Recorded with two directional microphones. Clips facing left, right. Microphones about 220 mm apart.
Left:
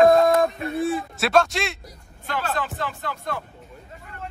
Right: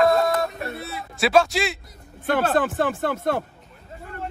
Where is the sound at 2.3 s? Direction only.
50° right (ahead or behind).